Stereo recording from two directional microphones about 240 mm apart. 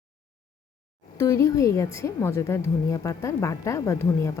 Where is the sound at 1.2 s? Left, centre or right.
Centre.